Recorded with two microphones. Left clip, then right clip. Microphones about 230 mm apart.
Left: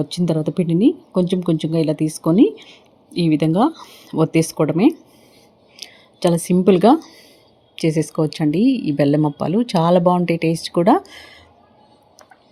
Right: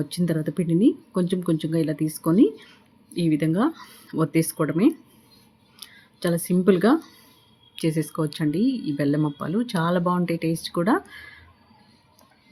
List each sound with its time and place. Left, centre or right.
0.1 s speech: centre
5.7 s a sound: centre
7.8 s speech: centre